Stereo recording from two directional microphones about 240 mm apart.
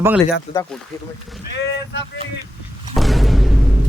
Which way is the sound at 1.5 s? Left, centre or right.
Left.